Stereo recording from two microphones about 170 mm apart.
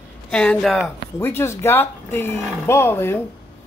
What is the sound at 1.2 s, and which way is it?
Speech, 15° left (ahead or behind).